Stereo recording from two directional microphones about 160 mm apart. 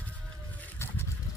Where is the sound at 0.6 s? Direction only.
15° left (ahead or behind).